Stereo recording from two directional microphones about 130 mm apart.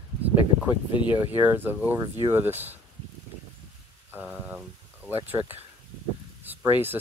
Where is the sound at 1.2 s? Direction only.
15° right (ahead or behind).